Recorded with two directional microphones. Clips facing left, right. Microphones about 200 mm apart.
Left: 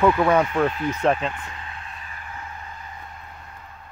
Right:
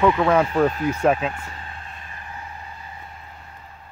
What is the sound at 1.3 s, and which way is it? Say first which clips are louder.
Vehicle: even; 35° right (ahead or behind).